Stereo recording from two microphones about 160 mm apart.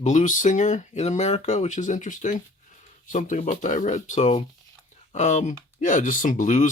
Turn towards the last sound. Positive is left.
turn(degrees=55)  # may be behind; listen again after turning